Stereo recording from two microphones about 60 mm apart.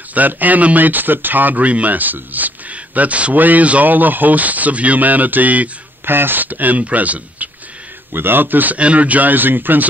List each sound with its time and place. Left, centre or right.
0.1 s speech: right
8.1 s a man's voice: right